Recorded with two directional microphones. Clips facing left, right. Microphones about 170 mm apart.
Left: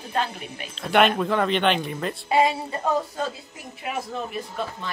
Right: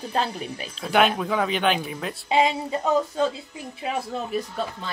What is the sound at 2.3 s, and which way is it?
Speech, 20° right (ahead or behind).